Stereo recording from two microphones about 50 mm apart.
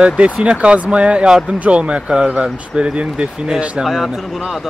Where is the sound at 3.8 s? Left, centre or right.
Centre.